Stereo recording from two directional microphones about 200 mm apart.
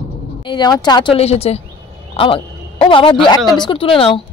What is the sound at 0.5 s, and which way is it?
Speech, 20° left (ahead or behind).